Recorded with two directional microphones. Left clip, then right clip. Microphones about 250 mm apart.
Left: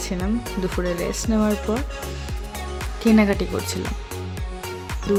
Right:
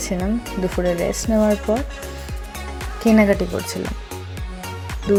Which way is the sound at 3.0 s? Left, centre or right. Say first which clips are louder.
Right 3 dB; centre.